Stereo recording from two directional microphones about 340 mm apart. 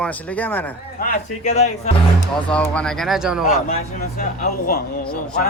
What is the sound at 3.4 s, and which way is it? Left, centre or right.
Speech, left.